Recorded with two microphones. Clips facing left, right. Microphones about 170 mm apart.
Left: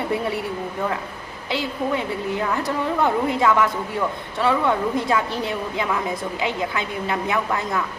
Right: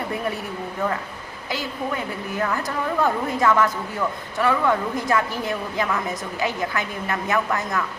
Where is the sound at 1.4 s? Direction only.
20° left (ahead or behind).